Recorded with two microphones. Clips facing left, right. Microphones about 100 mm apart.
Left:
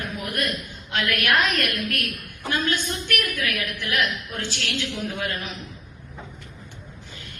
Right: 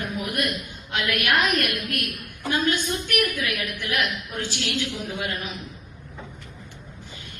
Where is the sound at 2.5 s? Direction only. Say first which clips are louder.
Right 2 dB; 15° right (ahead or behind).